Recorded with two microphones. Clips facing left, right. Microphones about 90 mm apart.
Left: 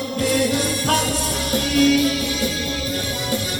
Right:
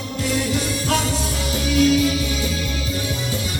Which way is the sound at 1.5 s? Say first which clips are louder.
Left 1 dB; 55° left (ahead or behind).